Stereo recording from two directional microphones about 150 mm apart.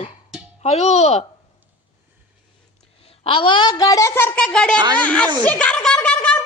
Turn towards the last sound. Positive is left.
turn(degrees=10)  # may be behind; listen again after turning